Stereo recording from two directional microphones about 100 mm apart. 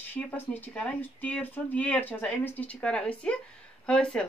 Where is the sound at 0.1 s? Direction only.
15° left (ahead or behind).